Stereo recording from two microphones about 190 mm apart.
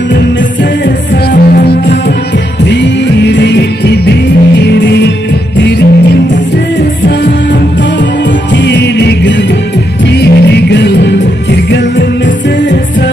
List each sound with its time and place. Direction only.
0.8 s music: 60° left (ahead or behind)
2.6 s music: 65° left (ahead or behind)
8.5 s music: 65° left (ahead or behind)